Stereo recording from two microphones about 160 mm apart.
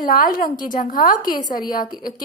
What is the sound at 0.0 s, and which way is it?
A woman's voice, 60° left (ahead or behind).